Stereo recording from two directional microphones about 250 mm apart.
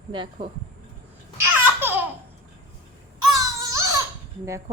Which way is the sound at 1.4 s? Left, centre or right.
Centre.